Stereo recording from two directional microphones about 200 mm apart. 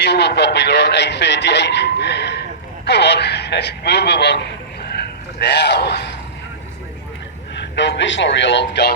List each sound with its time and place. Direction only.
0.0 s a man's voice: 55° left (ahead or behind)
7.5 s a man's voice: 60° left (ahead or behind)